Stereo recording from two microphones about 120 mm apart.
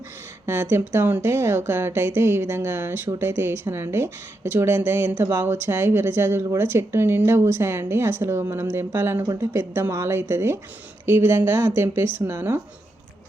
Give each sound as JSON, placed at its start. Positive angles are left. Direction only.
{"t": 0.4, "sound": "speech", "side_deg": -20}